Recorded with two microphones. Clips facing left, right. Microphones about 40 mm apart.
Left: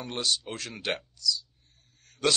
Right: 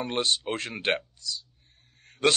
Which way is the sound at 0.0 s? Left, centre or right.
Right.